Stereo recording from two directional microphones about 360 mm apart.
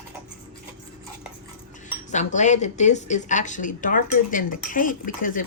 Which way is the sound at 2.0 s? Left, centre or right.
Centre.